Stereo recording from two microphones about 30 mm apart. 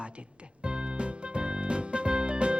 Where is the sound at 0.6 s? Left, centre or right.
Right.